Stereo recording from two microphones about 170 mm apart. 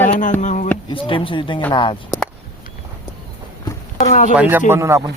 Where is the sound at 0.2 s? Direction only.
45° left (ahead or behind).